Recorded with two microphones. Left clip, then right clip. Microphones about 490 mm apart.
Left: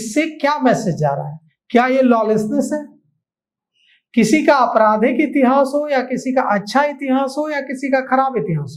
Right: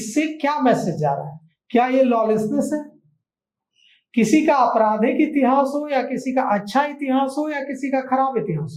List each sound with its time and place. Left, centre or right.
0.1 s a woman's voice: left
4.1 s a woman's voice: left